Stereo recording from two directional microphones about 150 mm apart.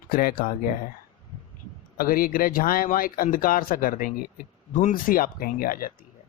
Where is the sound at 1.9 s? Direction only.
75° left (ahead or behind).